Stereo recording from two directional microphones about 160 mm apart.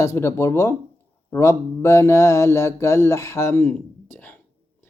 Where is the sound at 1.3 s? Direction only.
20° left (ahead or behind).